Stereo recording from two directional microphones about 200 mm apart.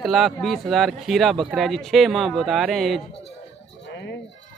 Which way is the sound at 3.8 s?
60° left (ahead or behind).